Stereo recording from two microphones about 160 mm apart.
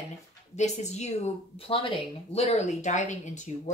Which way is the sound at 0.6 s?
45° left (ahead or behind).